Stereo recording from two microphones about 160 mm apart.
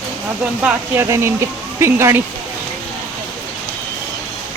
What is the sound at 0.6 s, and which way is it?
Speech, 10° right (ahead or behind).